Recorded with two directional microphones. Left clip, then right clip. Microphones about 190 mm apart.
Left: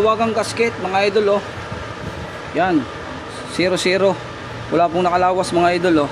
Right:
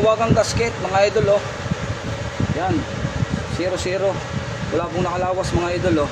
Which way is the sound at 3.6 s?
50° left (ahead or behind).